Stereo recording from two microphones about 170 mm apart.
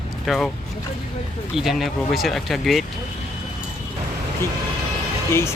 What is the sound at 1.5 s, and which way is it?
Speech, centre (ahead or behind).